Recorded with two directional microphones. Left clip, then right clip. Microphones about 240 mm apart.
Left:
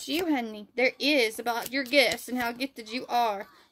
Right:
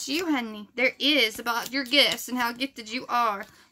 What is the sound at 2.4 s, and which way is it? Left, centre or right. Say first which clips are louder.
Speech: right 4 dB; right.